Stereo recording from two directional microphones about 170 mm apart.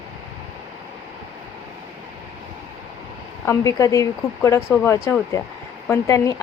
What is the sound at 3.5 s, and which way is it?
Speech, 20° left (ahead or behind).